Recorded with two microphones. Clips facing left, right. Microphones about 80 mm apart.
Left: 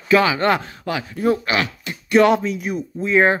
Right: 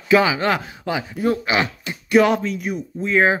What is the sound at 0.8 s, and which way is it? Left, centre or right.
Speech, centre.